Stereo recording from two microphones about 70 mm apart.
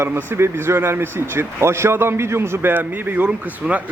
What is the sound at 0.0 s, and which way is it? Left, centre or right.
Speech, right.